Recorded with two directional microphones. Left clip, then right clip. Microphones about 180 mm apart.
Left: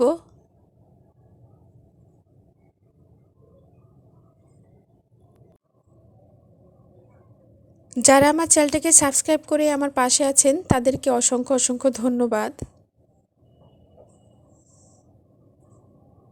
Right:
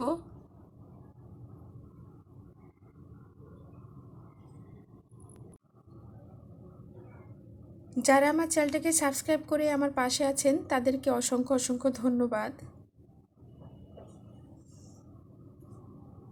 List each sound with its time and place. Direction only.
7.9 s a woman's voice: 45° left (ahead or behind)